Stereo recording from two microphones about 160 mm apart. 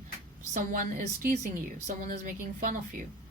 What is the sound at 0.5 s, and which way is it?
Speech, 55° right (ahead or behind).